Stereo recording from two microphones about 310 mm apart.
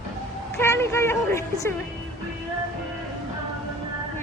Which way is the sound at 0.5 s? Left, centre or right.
Centre.